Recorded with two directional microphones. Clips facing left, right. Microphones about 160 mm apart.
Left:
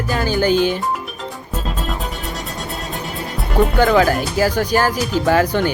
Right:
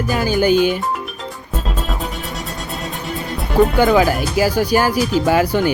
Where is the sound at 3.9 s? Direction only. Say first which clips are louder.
Even; 10° right (ahead or behind).